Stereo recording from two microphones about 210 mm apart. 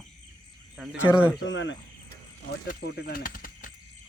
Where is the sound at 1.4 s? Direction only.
60° left (ahead or behind).